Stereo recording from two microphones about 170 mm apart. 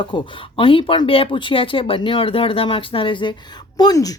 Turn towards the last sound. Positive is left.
turn(degrees=20)  # may be behind; listen again after turning